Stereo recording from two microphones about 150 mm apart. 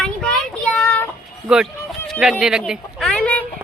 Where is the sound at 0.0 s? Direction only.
5° left (ahead or behind).